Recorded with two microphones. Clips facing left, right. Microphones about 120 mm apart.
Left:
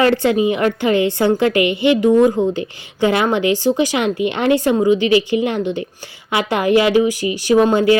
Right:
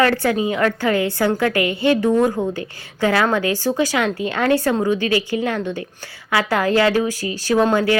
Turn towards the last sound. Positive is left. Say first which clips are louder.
# left 4 dB
turn(degrees=20)  # may be behind; listen again after turning